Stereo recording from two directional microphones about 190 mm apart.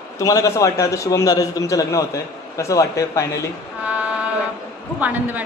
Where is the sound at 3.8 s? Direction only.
5° right (ahead or behind).